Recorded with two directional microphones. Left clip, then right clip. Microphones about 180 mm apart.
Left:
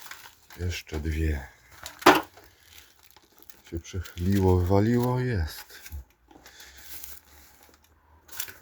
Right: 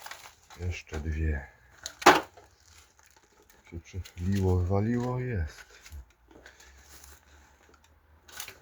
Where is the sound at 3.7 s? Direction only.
40° left (ahead or behind).